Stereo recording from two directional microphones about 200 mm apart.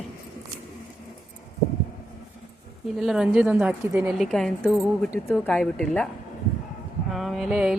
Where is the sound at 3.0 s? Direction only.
5° right (ahead or behind).